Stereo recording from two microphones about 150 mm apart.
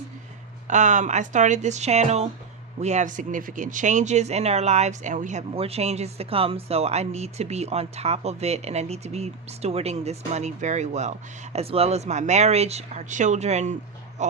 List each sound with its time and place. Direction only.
0.7 s speech: 55° right (ahead or behind)